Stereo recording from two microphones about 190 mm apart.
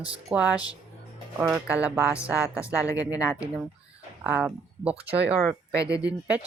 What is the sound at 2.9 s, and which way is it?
Speech, 15° left (ahead or behind).